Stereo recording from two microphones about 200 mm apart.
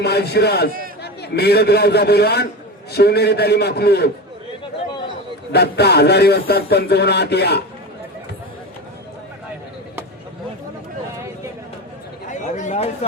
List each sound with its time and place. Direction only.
0.0 s a man's voice: 55° left (ahead or behind)
5.5 s speech: 55° left (ahead or behind)
12.3 s a sound: 40° left (ahead or behind)